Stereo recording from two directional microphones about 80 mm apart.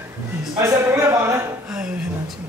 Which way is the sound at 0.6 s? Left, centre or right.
Right.